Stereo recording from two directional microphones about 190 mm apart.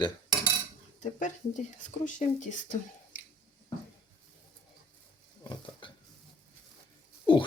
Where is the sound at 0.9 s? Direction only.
40° left (ahead or behind).